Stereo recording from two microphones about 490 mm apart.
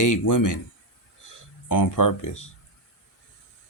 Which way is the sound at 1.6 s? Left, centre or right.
Left.